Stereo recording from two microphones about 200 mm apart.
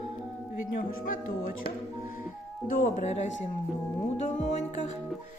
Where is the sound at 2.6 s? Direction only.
40° left (ahead or behind).